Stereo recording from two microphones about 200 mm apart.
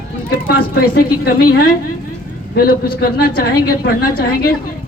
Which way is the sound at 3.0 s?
50° left (ahead or behind).